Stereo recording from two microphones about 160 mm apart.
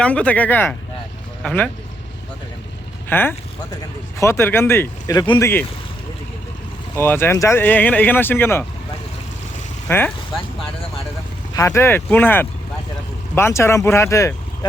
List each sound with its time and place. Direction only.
0.0 s speech: 10° left (ahead or behind)
3.1 s speech: 15° left (ahead or behind)
6.9 s speech: 15° left (ahead or behind)
9.9 s speech: 15° left (ahead or behind)
11.5 s speech: 20° left (ahead or behind)